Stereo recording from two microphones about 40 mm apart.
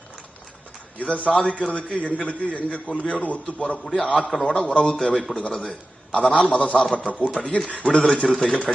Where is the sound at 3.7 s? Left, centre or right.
Centre.